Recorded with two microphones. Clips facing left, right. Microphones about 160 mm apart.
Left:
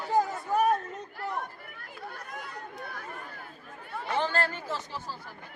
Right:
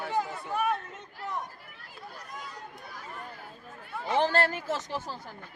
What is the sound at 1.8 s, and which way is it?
Chatter, 60° left (ahead or behind).